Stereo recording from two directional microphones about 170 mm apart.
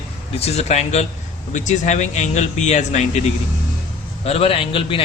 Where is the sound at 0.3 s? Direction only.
40° left (ahead or behind).